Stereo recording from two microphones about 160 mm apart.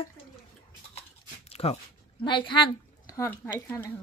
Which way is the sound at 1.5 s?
40° left (ahead or behind).